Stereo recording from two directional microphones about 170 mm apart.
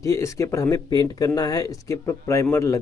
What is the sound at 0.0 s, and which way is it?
Speech, 15° left (ahead or behind).